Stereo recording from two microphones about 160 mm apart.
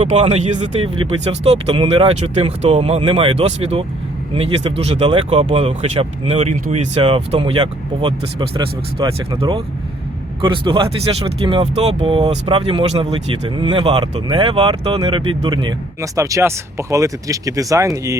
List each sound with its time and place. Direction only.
0.0 s speech: 45° right (ahead or behind)
10.4 s speech: 30° right (ahead or behind)